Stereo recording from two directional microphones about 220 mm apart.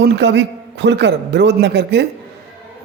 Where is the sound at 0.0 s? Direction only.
50° right (ahead or behind).